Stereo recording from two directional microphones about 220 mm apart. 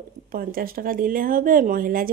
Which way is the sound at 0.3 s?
40° right (ahead or behind).